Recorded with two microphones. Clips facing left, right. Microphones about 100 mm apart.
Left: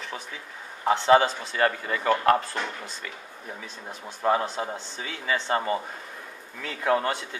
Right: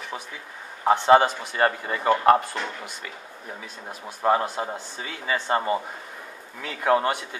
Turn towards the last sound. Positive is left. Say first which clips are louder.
# right 3 dB
turn(degrees=-20)  # may be behind; listen again after turning